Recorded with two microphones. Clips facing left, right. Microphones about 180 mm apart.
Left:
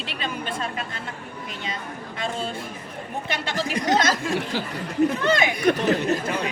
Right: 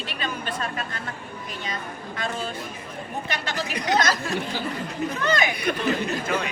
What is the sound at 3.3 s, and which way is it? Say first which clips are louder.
Speech: left 4 dB; 25° left (ahead or behind).